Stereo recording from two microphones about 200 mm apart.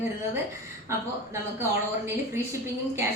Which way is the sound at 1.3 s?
15° right (ahead or behind).